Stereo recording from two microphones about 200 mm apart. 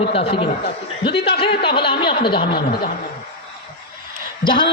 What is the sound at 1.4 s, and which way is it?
Speech, 25° left (ahead or behind).